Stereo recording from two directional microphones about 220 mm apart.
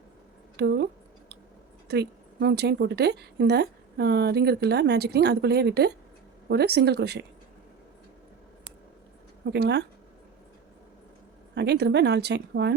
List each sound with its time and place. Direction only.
0.5 s speech: 50° right (ahead or behind)
1.9 s a woman's voice: 50° right (ahead or behind)
9.5 s a woman's voice: 50° right (ahead or behind)
11.5 s a woman's voice: 50° right (ahead or behind)